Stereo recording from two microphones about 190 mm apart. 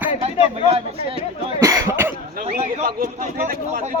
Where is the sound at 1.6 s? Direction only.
15° right (ahead or behind).